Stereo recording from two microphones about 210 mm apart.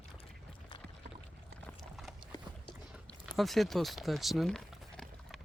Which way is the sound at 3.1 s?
Centre (ahead or behind).